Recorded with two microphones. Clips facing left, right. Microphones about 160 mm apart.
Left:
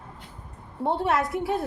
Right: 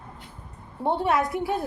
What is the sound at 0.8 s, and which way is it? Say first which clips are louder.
Speech: right 1 dB; centre (ahead or behind).